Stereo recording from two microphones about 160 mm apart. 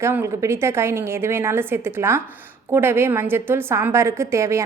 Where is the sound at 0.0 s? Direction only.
15° right (ahead or behind).